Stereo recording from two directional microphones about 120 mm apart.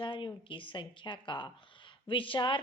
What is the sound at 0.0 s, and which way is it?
A woman's voice, 45° left (ahead or behind).